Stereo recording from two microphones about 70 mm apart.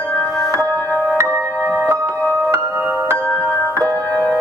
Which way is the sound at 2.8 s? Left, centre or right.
Centre.